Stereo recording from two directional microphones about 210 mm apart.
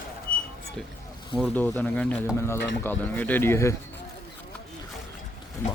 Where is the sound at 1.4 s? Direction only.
10° left (ahead or behind).